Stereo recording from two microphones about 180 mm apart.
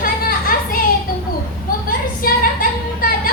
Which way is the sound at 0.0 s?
50° left (ahead or behind).